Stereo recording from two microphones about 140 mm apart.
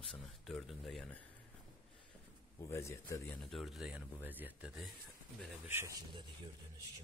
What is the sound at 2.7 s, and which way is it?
Speech, 20° left (ahead or behind).